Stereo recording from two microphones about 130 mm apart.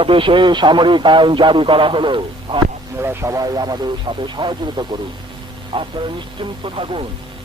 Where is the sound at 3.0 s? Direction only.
20° right (ahead or behind); by 5.9 s 45° right (ahead or behind).